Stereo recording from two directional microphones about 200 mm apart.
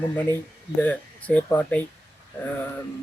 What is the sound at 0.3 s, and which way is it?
Speech, 10° left (ahead or behind).